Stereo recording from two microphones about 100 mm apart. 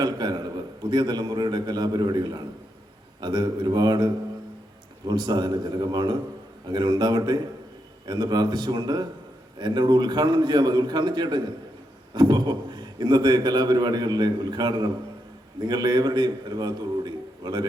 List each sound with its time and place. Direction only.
0.0 s a man's voice: 45° right (ahead or behind)